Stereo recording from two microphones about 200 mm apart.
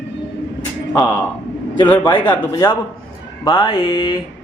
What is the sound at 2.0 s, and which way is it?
Speech, 20° left (ahead or behind).